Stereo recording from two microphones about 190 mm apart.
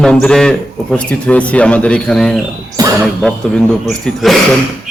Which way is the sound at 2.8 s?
20° right (ahead or behind).